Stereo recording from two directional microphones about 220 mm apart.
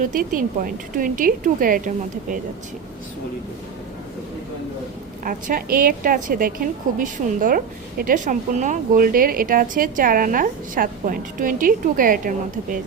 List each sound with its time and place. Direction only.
0.0 s a woman's voice: 40° right (ahead or behind)
5.2 s a woman's voice: 40° right (ahead or behind)